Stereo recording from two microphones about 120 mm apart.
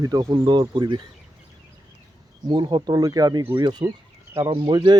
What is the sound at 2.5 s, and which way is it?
Speech, 35° right (ahead or behind).